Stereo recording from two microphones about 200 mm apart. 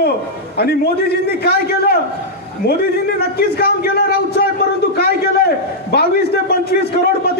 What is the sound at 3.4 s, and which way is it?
A man's voice, 50° left (ahead or behind).